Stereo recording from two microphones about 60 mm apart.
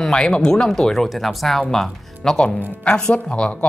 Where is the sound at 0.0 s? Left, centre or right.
Centre.